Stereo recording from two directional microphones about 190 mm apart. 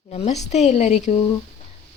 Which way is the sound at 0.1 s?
35° left (ahead or behind).